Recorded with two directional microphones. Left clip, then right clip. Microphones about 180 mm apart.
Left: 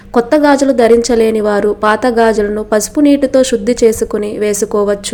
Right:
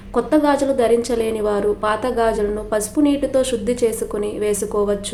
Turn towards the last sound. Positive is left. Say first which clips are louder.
# left 7 dB
turn(degrees=35)  # may be behind; listen again after turning